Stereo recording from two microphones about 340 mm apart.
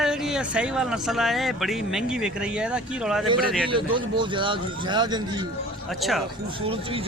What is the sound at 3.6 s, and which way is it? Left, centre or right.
Speech, centre.